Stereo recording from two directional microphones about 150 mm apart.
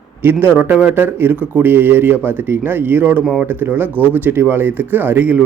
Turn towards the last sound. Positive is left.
turn(degrees=-10)  # may be behind; listen again after turning